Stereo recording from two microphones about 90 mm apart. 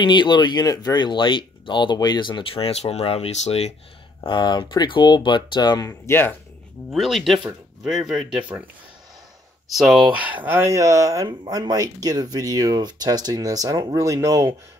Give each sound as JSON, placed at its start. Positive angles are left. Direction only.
{"t": 0.0, "sound": "speech", "side_deg": 60}
{"t": 4.3, "sound": "speech", "side_deg": 55}
{"t": 5.9, "sound": "speech", "side_deg": 25}
{"t": 6.9, "sound": "speech", "side_deg": 0}
{"t": 8.4, "sound": "speech", "side_deg": -15}
{"t": 10.1, "sound": "speech", "side_deg": -15}
{"t": 11.2, "sound": "speech", "side_deg": -50}